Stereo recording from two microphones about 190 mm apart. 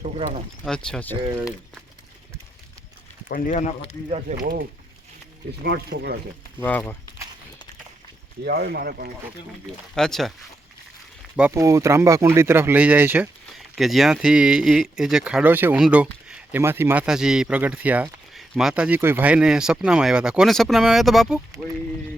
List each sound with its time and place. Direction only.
0.0 s speech: 35° right (ahead or behind)
0.6 s speech: 5° left (ahead or behind)
3.2 s speech: 45° left (ahead or behind)
4.3 s speech: 40° right (ahead or behind)
5.6 s speech: 60° right (ahead or behind)
6.6 s speech: 10° left (ahead or behind)
8.4 s speech: 55° right (ahead or behind)
9.9 s speech: centre (ahead or behind)
11.3 s speech: 10° right (ahead or behind)